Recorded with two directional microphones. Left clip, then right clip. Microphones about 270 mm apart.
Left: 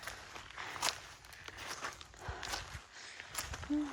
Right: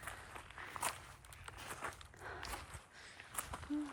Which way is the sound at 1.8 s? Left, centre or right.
Centre.